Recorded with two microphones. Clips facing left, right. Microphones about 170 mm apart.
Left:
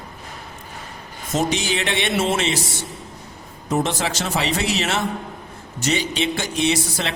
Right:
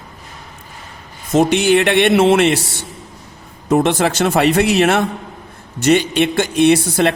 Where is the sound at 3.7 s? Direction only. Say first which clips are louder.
Right 8 dB; 60° right (ahead or behind).